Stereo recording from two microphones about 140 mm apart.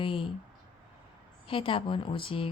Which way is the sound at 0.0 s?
40° left (ahead or behind).